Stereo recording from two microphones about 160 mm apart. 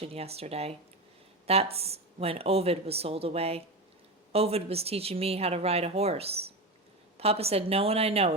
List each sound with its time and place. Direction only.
0.0 s speech: 40° right (ahead or behind)